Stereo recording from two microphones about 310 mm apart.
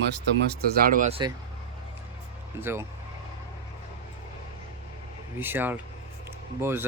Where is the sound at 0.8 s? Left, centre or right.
Right.